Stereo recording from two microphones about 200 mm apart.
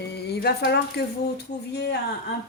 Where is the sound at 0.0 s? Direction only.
55° left (ahead or behind).